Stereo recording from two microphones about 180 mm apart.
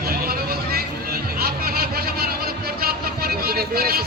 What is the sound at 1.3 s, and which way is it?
Vehicle, 55° right (ahead or behind).